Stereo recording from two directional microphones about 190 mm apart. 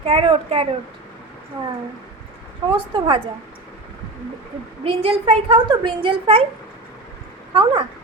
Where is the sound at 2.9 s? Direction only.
25° right (ahead or behind).